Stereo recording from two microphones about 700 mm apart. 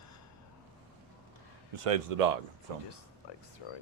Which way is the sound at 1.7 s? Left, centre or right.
Right.